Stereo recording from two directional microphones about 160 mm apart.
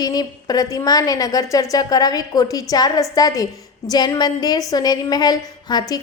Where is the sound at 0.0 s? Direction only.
25° left (ahead or behind).